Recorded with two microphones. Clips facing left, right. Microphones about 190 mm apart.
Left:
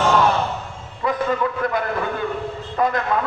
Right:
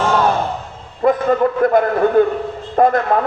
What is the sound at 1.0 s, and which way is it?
A man's voice, 50° right (ahead or behind).